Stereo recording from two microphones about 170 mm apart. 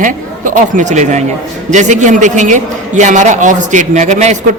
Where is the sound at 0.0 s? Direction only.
50° right (ahead or behind).